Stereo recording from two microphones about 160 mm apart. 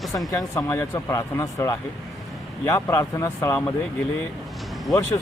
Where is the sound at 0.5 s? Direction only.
15° left (ahead or behind).